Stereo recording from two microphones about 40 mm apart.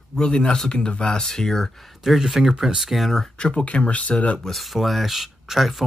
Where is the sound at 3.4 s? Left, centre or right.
Left.